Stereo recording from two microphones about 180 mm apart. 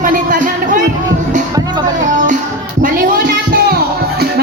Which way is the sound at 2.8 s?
45° right (ahead or behind).